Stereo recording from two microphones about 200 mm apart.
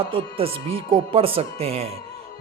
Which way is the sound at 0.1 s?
30° right (ahead or behind).